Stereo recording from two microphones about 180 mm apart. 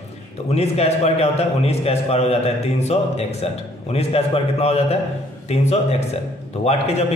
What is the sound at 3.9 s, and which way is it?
A man's voice, 35° left (ahead or behind).